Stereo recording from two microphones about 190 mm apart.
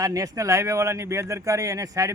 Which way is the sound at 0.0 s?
15° right (ahead or behind).